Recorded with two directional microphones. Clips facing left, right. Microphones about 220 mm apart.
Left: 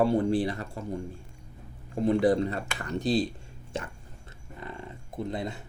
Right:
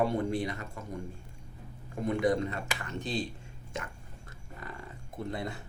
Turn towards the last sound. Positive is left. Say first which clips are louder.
# left 3 dB
turn(degrees=20)  # may be behind; listen again after turning